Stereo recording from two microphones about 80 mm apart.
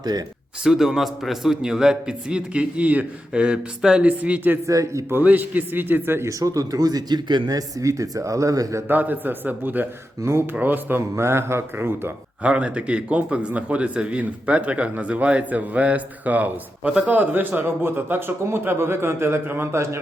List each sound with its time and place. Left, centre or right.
0.0 s speech: right
0.6 s a man's voice: centre
4.6 s speech: right
5.0 s a man's voice: right
6.2 s speech: right
8.9 s a man's voice: right
10.5 s a man's voice: right
12.4 s a man's voice: centre; by 20.0 s right